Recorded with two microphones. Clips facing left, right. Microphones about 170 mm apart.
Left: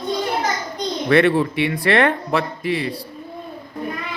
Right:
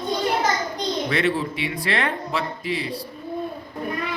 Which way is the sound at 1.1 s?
60° left (ahead or behind).